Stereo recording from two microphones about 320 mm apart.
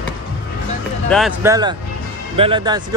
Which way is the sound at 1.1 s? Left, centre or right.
Centre.